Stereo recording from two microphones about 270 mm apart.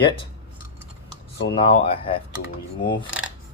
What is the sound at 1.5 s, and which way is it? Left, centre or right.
Speech, centre.